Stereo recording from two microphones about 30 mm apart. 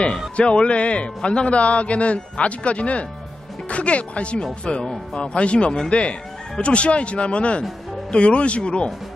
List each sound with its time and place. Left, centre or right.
0.4 s a man's voice: left
4.6 s a man's voice: left